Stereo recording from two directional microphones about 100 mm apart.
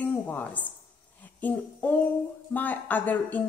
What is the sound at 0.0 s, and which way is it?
A woman's voice, 15° left (ahead or behind).